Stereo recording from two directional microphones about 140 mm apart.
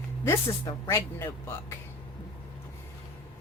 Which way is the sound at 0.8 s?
20° left (ahead or behind).